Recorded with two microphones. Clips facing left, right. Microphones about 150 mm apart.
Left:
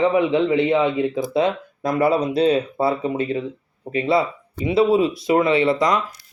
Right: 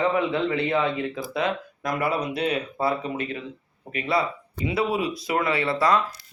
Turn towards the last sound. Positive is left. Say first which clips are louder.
# left 5 dB
turn(degrees=20)  # may be behind; listen again after turning